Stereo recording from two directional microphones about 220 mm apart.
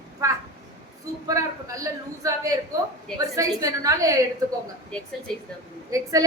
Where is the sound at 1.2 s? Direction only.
15° right (ahead or behind).